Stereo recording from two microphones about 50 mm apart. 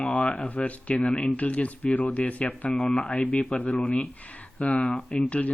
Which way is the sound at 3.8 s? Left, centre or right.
Left.